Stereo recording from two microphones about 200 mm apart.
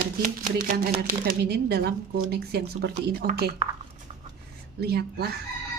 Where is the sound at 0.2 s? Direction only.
45° right (ahead or behind).